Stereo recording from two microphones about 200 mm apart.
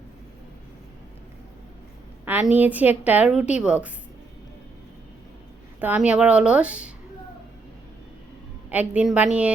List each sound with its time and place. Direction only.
2.2 s a woman's voice: 10° right (ahead or behind)
5.8 s a woman's voice: 5° right (ahead or behind)
8.7 s a woman's voice: 5° right (ahead or behind)